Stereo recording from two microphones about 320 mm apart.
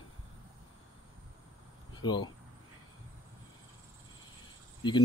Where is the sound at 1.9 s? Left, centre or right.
Centre.